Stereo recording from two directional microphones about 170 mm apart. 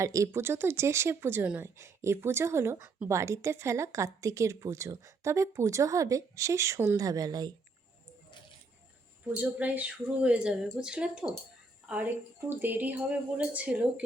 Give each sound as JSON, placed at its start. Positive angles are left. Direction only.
{"t": 0.0, "sound": "speech", "side_deg": -20}
{"t": 9.2, "sound": "speech", "side_deg": -10}